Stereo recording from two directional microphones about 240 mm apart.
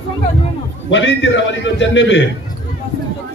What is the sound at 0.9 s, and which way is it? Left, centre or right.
A man's voice, left.